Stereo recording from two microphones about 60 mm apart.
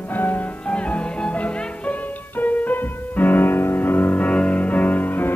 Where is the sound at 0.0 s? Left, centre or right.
Left.